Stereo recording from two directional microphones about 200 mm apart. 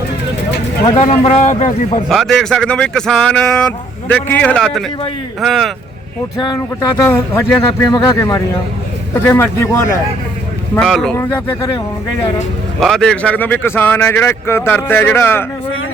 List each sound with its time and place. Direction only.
0.9 s a man's voice: 30° left (ahead or behind)
2.0 s speech: centre (ahead or behind)
6.4 s speech: 20° left (ahead or behind)
10.8 s speech: 5° left (ahead or behind)
12.8 s speech: 5° left (ahead or behind)